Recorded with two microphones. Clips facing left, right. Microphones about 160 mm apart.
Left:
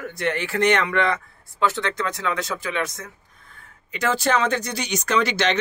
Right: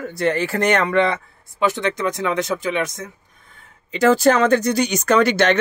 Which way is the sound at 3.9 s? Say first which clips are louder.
Right 7 dB; 35° right (ahead or behind).